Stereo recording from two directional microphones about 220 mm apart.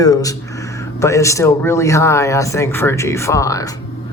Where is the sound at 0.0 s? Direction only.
15° left (ahead or behind).